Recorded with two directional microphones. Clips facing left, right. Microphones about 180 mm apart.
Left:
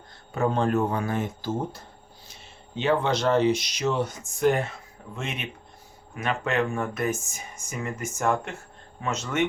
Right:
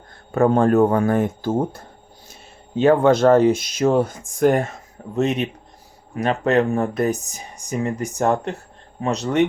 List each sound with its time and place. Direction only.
0.3 s speech: 55° right (ahead or behind); by 9.5 s 35° right (ahead or behind)